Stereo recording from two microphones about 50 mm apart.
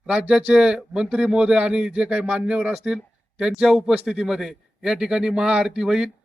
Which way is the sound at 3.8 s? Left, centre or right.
Centre.